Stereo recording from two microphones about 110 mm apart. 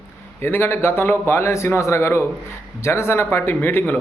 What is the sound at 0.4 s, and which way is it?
A man's voice, 20° left (ahead or behind).